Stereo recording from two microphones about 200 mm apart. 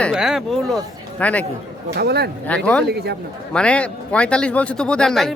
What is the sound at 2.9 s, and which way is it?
Speech, 55° right (ahead or behind).